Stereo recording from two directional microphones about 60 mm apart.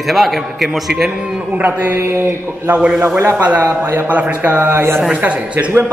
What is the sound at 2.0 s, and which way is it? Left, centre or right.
Mantra, right.